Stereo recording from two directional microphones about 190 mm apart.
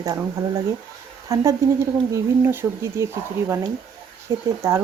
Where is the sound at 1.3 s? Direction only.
15° right (ahead or behind).